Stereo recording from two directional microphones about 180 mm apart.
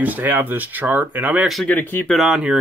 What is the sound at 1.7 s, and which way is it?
Speech, 10° left (ahead or behind).